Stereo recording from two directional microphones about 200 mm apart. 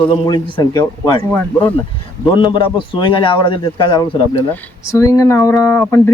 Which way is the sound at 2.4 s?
25° left (ahead or behind).